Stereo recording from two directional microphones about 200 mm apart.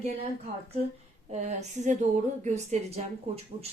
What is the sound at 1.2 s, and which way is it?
Speech, 35° right (ahead or behind).